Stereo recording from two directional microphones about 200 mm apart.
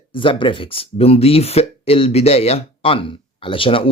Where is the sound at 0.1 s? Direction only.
25° left (ahead or behind).